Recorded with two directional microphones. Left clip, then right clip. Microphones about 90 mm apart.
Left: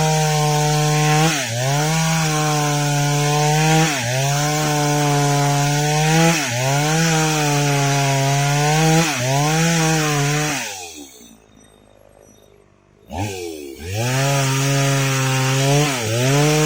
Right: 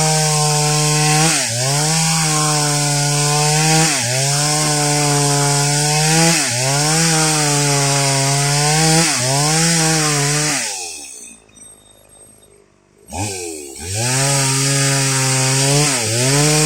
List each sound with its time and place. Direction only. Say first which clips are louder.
0.0 s chainsaw: right 2 dB; 35° right (ahead or behind)
13.9 s chainsaw: right 2 dB; 40° right (ahead or behind)